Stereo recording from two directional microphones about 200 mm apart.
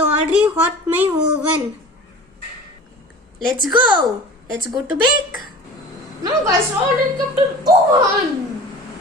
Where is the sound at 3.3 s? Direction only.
Centre (ahead or behind).